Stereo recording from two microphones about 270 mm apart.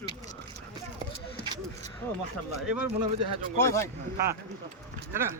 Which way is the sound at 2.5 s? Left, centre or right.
Right.